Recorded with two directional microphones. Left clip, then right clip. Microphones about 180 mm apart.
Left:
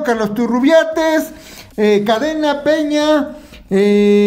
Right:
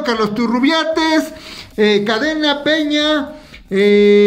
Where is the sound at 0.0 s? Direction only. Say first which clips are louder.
Even; 50° left (ahead or behind).